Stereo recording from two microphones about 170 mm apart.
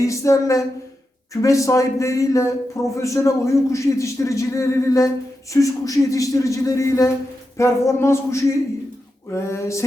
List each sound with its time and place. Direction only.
0.0 s a man's voice: 20° left (ahead or behind)